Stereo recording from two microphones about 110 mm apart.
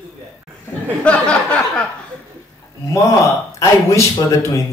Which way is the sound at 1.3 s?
10° left (ahead or behind).